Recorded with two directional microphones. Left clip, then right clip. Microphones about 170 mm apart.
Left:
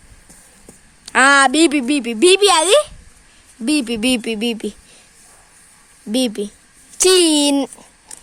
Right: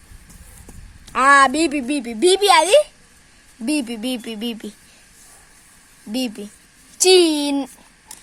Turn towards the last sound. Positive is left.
turn(degrees=55)  # may be behind; listen again after turning